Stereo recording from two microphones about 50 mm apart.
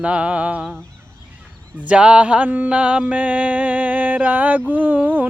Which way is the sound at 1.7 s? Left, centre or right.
Right.